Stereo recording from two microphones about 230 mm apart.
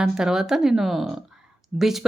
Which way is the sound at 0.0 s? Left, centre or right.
Centre.